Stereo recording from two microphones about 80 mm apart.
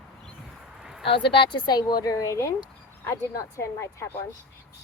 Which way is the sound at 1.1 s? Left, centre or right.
Left.